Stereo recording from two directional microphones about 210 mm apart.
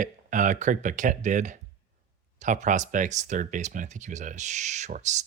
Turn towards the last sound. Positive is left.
turn(degrees=-35)  # may be behind; listen again after turning